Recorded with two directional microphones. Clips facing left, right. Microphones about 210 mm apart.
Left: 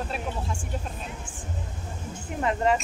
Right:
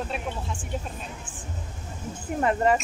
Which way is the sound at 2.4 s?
50° right (ahead or behind).